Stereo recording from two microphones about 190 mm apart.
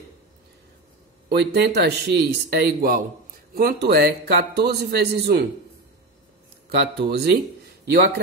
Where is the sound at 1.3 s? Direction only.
60° right (ahead or behind).